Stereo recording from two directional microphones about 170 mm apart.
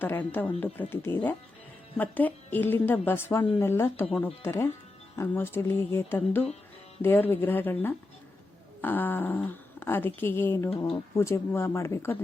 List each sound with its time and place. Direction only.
0.0 s speech: 10° left (ahead or behind)
10.7 s speech: 35° left (ahead or behind)
11.2 s speech: 15° left (ahead or behind)